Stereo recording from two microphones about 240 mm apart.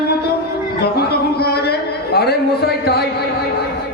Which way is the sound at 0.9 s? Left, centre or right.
Left.